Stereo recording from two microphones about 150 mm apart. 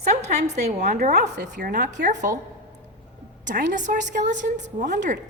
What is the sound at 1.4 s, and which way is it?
Speech, 70° right (ahead or behind).